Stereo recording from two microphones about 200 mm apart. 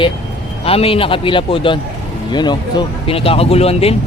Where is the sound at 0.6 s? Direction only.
30° left (ahead or behind).